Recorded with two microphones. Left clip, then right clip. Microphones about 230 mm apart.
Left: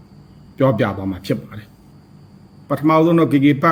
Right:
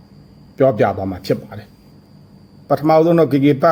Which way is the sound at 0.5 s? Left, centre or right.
Centre.